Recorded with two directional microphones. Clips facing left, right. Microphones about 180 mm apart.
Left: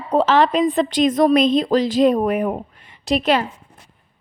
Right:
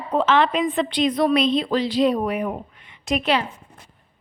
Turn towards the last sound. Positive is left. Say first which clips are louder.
# left 4 dB
turn(degrees=45)  # may be behind; listen again after turning